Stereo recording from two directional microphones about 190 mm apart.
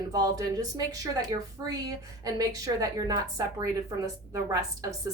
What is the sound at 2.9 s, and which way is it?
A woman's voice, 20° right (ahead or behind).